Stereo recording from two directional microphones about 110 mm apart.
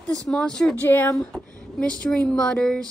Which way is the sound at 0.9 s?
20° left (ahead or behind).